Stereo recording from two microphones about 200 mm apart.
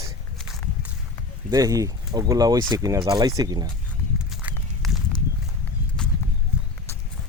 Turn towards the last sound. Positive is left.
turn(degrees=-5)  # may be behind; listen again after turning